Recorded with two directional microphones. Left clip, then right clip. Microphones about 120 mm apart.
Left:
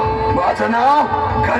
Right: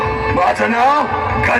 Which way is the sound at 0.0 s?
20° right (ahead or behind).